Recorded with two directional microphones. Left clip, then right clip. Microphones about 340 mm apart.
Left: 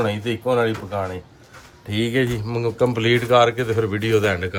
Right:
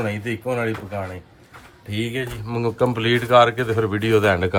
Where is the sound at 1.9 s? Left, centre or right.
Centre.